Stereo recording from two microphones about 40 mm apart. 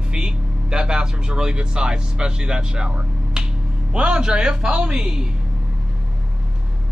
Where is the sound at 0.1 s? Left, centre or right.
Right.